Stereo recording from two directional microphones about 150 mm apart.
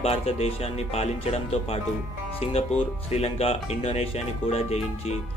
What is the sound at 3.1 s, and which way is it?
Speech, 40° left (ahead or behind).